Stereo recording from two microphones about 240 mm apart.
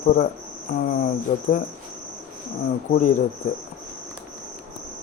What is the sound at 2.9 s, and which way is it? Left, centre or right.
Cricket, left.